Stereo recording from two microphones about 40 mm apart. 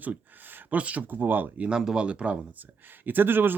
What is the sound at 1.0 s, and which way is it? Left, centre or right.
Speech, right.